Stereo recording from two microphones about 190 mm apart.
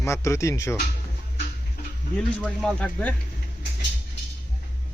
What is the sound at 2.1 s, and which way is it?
A man's voice, 5° left (ahead or behind).